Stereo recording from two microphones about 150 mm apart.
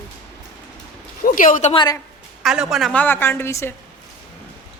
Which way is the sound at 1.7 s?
25° left (ahead or behind).